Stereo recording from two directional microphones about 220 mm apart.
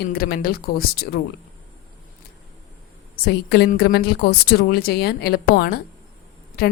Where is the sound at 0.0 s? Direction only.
45° left (ahead or behind).